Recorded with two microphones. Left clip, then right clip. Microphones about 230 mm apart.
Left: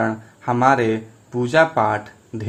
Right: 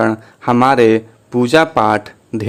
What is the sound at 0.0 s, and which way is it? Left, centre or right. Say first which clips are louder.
Speech: right 7 dB; right.